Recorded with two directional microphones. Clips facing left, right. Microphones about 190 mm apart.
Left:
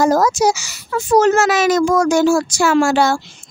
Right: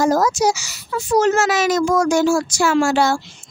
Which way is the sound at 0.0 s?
55° left (ahead or behind).